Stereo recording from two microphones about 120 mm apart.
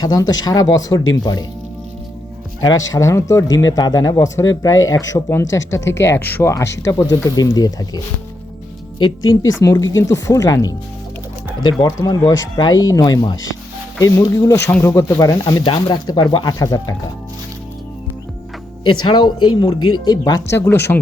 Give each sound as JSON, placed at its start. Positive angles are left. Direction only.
{"t": 0.0, "sound": "speech", "side_deg": 35}
{"t": 2.6, "sound": "speech", "side_deg": 30}
{"t": 9.4, "sound": "speech", "side_deg": 25}
{"t": 15.6, "sound": "speech", "side_deg": 40}
{"t": 18.9, "sound": "speech", "side_deg": 40}
{"t": 20.6, "sound": "speech", "side_deg": 20}